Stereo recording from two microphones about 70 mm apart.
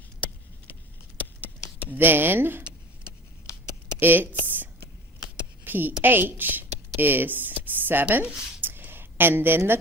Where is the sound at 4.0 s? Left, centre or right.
Right.